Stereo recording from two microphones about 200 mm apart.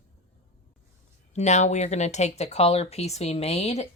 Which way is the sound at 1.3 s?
35° left (ahead or behind).